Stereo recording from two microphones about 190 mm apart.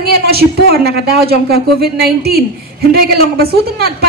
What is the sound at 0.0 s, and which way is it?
A woman's voice, 55° right (ahead or behind).